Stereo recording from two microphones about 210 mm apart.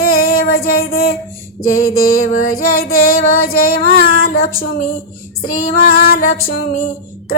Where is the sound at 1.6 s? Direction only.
80° left.